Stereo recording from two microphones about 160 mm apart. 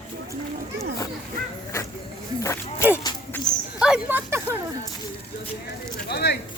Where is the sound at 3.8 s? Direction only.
5° right (ahead or behind).